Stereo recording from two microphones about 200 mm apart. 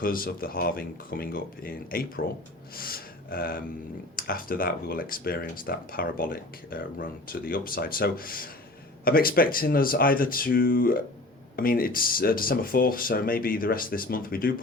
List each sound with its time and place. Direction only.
0.0 s speech: 45° left (ahead or behind)